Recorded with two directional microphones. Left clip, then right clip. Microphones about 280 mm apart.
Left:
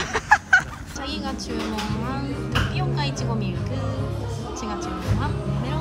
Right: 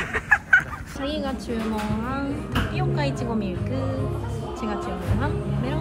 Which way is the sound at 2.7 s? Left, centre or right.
Centre.